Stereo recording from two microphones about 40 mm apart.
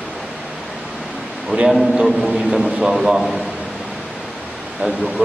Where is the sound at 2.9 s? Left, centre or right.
Centre.